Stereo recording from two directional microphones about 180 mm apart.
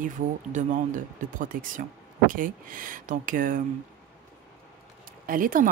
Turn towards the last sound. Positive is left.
turn(degrees=-50)  # may be behind; listen again after turning